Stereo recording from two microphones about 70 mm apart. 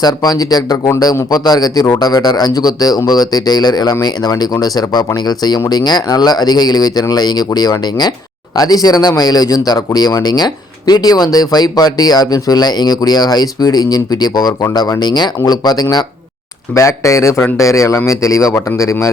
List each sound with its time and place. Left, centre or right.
0.0 s a man's voice: left
8.5 s a man's voice: left
16.7 s speech: left